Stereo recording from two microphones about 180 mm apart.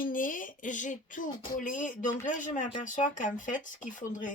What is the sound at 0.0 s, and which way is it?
Speech, 50° left (ahead or behind).